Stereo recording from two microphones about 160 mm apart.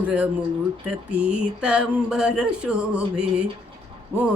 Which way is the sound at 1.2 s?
5° right (ahead or behind).